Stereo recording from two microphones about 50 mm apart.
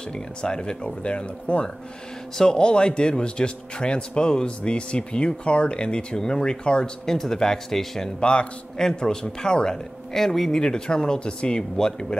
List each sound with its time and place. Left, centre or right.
0.1 s a man's voice: centre
8.2 s a man's voice: centre
10.6 s a man's voice: centre